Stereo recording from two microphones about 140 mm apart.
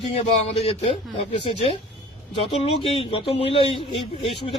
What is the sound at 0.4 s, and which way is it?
Speech, 45° left (ahead or behind).